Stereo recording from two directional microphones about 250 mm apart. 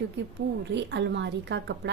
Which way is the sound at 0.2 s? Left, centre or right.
Right.